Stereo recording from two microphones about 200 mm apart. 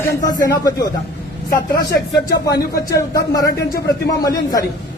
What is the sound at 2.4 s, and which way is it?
Speech, 15° left (ahead or behind).